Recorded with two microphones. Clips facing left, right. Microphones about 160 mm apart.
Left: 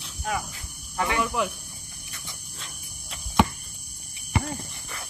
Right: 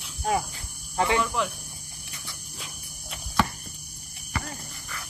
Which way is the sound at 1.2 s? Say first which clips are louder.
Left 1 dB; 10° left (ahead or behind).